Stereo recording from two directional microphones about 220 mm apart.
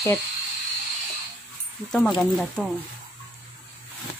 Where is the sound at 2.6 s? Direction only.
5° left (ahead or behind).